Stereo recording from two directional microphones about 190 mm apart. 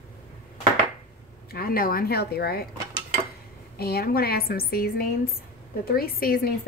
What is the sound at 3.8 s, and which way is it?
A woman's voice, 55° left (ahead or behind).